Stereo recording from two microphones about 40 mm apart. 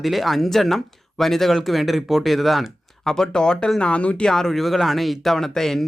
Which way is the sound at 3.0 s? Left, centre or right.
Centre.